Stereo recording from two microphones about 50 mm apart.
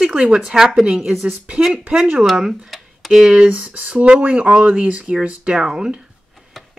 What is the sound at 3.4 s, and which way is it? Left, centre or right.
Speech, right.